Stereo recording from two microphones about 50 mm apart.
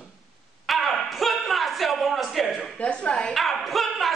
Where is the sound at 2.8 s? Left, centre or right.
Left.